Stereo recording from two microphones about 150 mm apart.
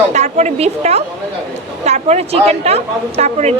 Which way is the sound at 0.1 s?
50° right (ahead or behind).